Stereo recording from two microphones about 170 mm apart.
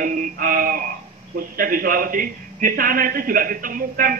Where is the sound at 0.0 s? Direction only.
50° right (ahead or behind).